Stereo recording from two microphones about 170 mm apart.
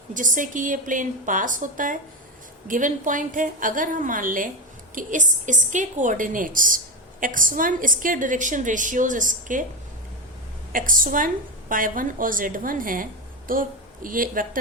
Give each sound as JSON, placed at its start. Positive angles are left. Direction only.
{"t": 0.1, "sound": "a woman's voice", "side_deg": -50}
{"t": 10.7, "sound": "a woman's voice", "side_deg": -55}